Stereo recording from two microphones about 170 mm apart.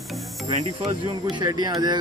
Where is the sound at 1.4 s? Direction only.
25° right (ahead or behind).